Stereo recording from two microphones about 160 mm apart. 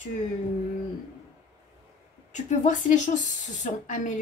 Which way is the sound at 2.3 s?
50° left (ahead or behind).